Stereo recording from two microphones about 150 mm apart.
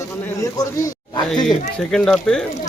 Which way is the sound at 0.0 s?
20° left (ahead or behind).